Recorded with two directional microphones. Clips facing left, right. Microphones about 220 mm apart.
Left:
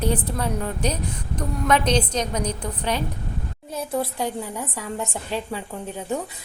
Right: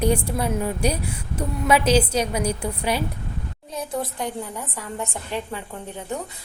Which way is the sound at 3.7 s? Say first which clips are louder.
Left 2 dB; 5° left (ahead or behind).